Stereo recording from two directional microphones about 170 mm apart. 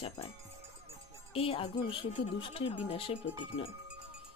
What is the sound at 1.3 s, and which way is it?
Speech, 35° left (ahead or behind).